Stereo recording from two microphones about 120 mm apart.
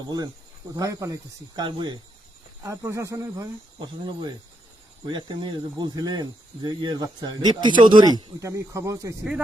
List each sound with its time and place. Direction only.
0.8 s speech: 30° right (ahead or behind)
2.6 s speech: 25° right (ahead or behind)
3.8 s speech: 40° right (ahead or behind)